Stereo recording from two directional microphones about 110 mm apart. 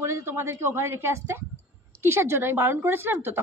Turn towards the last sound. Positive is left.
turn(degrees=-20)  # may be behind; listen again after turning